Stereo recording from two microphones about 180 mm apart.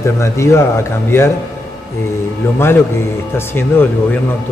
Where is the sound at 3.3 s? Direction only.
10° left (ahead or behind).